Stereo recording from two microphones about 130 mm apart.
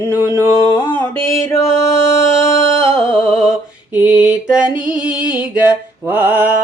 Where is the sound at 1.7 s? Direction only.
20° left (ahead or behind).